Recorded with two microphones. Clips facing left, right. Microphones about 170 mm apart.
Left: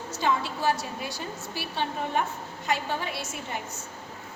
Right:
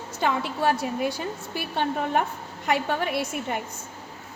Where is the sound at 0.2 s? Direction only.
55° right (ahead or behind).